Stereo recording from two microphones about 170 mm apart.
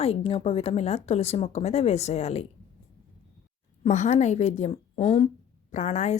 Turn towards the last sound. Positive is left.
turn(degrees=45)  # may be behind; listen again after turning